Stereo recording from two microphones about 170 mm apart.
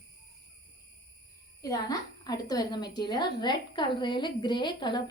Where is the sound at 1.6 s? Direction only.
20° left (ahead or behind).